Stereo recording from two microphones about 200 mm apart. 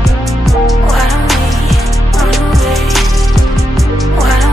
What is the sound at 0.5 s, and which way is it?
Music, centre (ahead or behind).